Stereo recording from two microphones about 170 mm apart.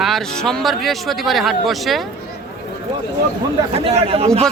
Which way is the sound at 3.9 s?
35° right (ahead or behind).